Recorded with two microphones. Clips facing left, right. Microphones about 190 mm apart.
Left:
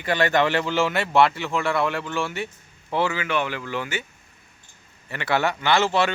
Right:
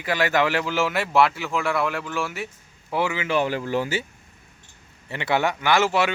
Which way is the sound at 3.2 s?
35° right (ahead or behind).